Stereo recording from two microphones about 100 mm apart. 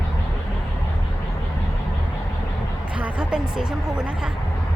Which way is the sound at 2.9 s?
10° right (ahead or behind).